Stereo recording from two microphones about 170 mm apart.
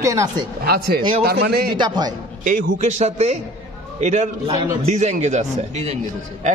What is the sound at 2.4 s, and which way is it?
A man's voice, 45° right (ahead or behind).